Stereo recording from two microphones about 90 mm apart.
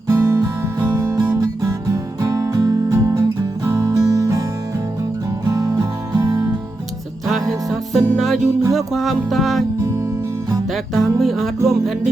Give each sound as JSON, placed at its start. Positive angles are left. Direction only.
{"t": 0.1, "sound": "music", "side_deg": -35}
{"t": 5.5, "sound": "music", "side_deg": -40}
{"t": 7.9, "sound": "music", "side_deg": 0}
{"t": 10.9, "sound": "music", "side_deg": 0}